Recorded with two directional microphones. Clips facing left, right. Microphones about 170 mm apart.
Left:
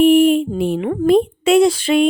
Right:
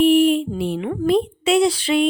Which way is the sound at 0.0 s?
50° left (ahead or behind).